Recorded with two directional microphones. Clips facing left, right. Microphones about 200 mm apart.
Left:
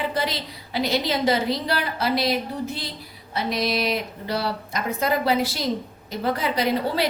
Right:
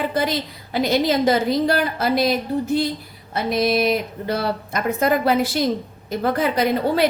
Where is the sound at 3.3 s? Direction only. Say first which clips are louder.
Right 5 dB; 50° right (ahead or behind).